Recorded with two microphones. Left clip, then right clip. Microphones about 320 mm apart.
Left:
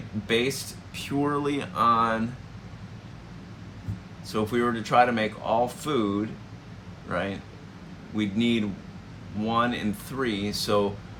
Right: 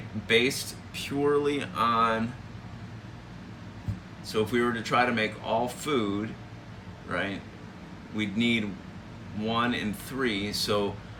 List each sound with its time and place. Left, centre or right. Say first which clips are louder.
0.3 s speech: right 2 dB; centre
4.3 s speech: left 1 dB; centre
7.1 s speech: left 1 dB; centre